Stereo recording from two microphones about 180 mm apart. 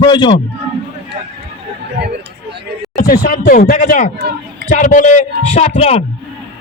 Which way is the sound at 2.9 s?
55° left (ahead or behind).